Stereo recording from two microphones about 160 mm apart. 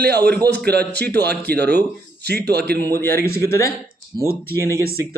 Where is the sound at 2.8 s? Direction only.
15° left (ahead or behind).